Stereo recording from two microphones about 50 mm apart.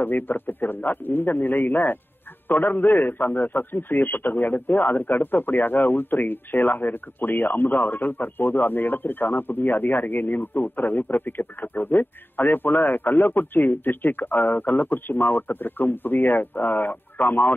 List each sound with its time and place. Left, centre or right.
0.0 s a man's voice: left